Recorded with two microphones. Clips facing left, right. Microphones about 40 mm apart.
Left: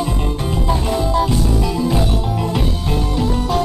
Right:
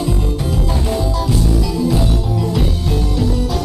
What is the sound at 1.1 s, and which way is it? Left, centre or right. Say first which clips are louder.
Music: left 3 dB; left.